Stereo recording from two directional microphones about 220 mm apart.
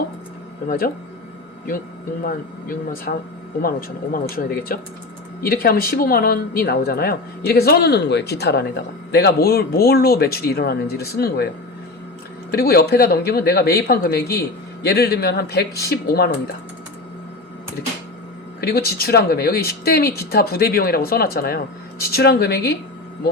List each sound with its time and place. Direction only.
2.2 s speech: 40° left (ahead or behind)
12.5 s speech: 45° left (ahead or behind)
18.6 s speech: 45° left (ahead or behind)